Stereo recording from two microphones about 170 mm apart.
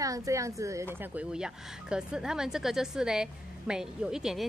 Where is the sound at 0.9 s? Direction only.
5° right (ahead or behind).